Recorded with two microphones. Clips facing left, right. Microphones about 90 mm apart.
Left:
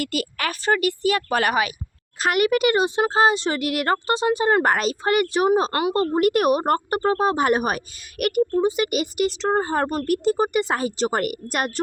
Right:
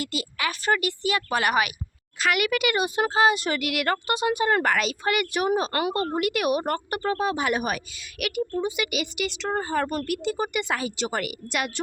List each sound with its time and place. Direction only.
0.0 s speech: 50° left (ahead or behind)